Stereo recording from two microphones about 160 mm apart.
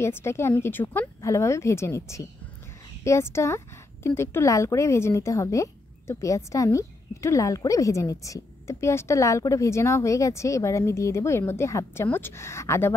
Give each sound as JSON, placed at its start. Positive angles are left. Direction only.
{"t": 0.0, "sound": "speech", "side_deg": 15}